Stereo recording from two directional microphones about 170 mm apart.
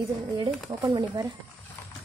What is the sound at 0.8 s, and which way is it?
Speech, 20° right (ahead or behind).